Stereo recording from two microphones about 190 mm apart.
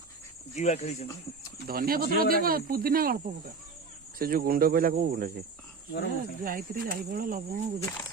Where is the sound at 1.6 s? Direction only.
50° right (ahead or behind).